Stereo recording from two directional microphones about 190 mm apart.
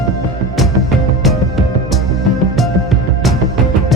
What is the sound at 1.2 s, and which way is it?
Music, centre (ahead or behind).